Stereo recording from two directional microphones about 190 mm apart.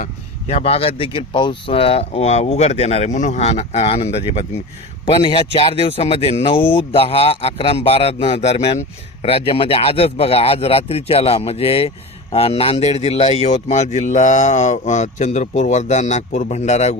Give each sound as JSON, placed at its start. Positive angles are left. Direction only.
{"t": 0.0, "sound": "a man's voice", "side_deg": 35}